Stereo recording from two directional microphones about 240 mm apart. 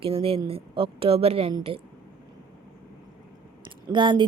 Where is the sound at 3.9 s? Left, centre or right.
Centre.